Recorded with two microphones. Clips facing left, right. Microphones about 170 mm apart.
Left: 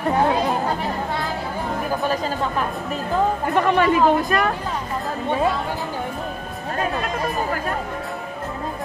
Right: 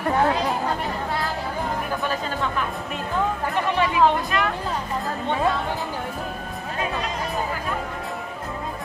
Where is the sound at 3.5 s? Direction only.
55° left (ahead or behind).